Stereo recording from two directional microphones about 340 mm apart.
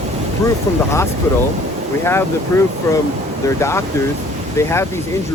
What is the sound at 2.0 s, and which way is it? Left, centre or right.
Speech, centre.